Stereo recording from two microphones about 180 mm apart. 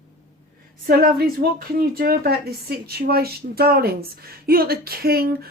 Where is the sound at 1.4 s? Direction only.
55° right (ahead or behind).